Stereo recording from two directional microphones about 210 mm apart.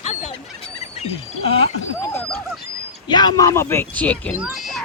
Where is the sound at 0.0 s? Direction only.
30° left (ahead or behind).